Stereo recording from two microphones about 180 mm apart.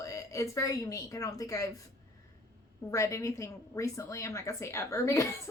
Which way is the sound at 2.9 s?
15° left (ahead or behind).